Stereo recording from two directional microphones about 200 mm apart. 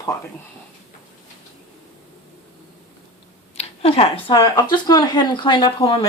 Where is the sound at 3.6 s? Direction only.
30° left (ahead or behind).